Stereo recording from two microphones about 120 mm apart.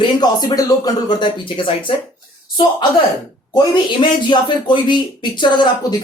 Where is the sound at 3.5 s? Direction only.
40° left (ahead or behind).